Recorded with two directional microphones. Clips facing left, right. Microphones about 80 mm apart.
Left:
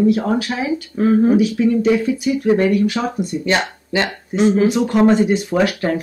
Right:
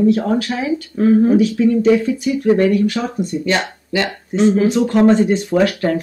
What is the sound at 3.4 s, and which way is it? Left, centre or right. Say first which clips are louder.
Speech: even; left.